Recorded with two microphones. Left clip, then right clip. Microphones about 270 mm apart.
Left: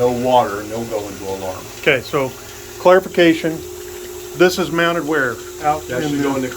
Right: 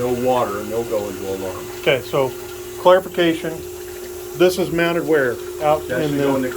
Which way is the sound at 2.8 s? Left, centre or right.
Centre.